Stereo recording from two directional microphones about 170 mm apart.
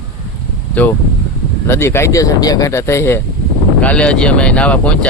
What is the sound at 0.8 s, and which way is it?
Speech, 10° left (ahead or behind).